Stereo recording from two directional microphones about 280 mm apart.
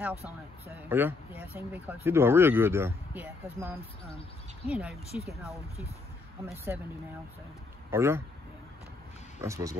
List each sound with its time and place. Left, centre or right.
0.8 s speech: centre
5.1 s speech: left
6.5 s speech: centre
7.9 s speech: centre
9.4 s speech: centre